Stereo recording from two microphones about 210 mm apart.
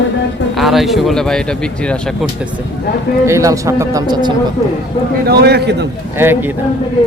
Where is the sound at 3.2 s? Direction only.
15° right (ahead or behind).